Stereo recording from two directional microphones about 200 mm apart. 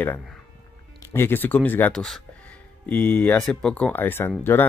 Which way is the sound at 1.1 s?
10° left (ahead or behind).